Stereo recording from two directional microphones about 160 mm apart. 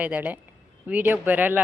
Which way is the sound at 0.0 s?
10° right (ahead or behind).